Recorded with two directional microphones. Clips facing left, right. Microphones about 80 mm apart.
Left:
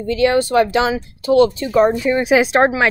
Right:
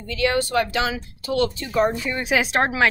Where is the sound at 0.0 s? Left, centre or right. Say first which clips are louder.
Left 7 dB; left.